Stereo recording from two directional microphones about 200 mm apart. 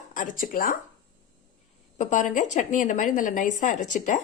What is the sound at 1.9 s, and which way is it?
A woman's voice, 40° left (ahead or behind).